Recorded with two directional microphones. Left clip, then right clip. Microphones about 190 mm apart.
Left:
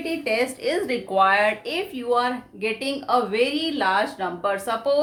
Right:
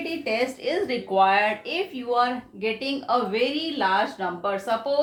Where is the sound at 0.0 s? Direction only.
30° left (ahead or behind).